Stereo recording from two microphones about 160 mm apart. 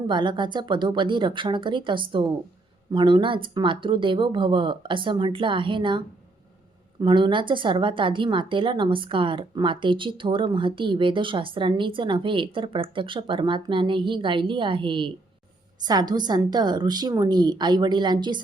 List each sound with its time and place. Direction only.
0.1 s a woman's voice: 30° right (ahead or behind)
7.0 s a woman's voice: 30° right (ahead or behind)